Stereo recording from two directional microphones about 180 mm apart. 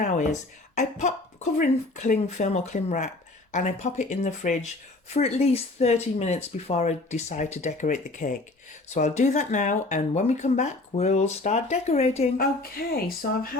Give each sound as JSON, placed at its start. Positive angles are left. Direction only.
{"t": 0.0, "sound": "a sound", "side_deg": 45}
{"t": 0.8, "sound": "speech", "side_deg": 40}
{"t": 12.4, "sound": "a woman's voice", "side_deg": 60}